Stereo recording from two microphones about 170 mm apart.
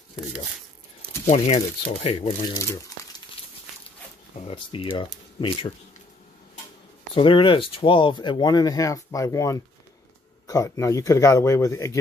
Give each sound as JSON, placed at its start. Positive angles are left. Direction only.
{"t": 1.2, "sound": "speech", "side_deg": 40}
{"t": 2.5, "sound": "speech", "side_deg": 20}
{"t": 4.4, "sound": "speech", "side_deg": 35}
{"t": 7.2, "sound": "speech", "side_deg": 30}